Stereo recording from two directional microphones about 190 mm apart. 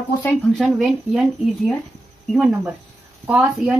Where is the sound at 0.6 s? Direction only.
Centre (ahead or behind).